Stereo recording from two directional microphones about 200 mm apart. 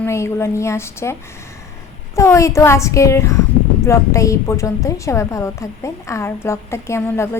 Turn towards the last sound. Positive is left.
turn(degrees=10)  # may be behind; listen again after turning